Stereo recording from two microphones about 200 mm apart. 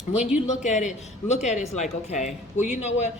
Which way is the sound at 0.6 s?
35° left (ahead or behind).